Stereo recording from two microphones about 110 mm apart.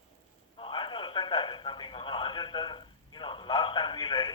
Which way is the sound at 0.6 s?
50° left (ahead or behind).